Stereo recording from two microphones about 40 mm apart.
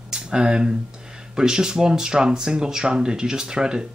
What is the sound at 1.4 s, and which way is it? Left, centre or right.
Speech, centre.